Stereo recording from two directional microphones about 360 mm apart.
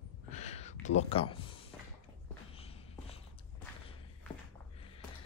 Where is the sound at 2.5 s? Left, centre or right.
Centre.